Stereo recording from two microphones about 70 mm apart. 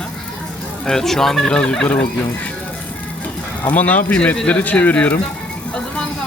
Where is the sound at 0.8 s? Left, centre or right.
Centre.